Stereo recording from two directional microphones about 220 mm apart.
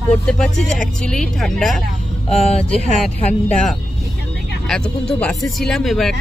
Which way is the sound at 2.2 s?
30° left (ahead or behind).